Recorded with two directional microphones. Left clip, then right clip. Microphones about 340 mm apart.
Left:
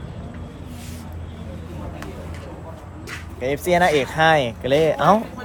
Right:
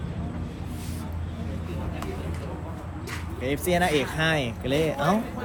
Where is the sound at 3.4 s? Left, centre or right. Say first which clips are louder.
Left 7 dB; centre.